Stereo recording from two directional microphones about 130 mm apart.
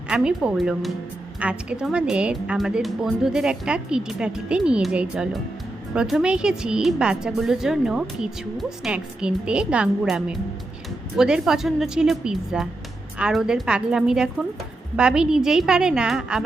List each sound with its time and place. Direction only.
0.1 s a woman's voice: 5° right (ahead or behind)